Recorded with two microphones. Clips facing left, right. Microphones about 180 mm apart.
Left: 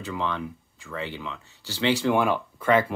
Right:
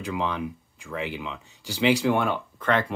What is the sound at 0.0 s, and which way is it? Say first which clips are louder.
Speech: right 1 dB; 15° right (ahead or behind).